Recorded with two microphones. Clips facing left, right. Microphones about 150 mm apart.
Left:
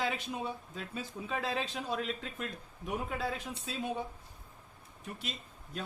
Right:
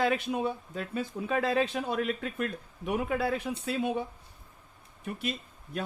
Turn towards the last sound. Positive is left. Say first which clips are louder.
# right 7 dB
turn(degrees=-60)  # may be behind; listen again after turning